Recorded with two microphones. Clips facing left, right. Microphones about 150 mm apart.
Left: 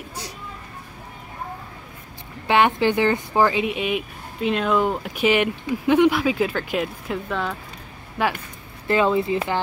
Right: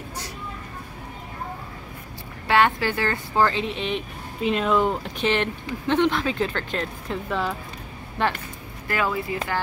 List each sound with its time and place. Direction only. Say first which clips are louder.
2.4 s speech: left 2 dB; 20° left (ahead or behind)
8.8 s speech: left 6 dB; 25° left (ahead or behind)